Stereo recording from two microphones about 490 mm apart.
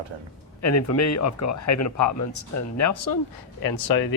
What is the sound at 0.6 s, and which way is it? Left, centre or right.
Speech, left.